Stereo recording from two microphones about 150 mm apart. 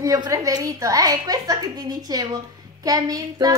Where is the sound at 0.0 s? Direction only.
20° right (ahead or behind).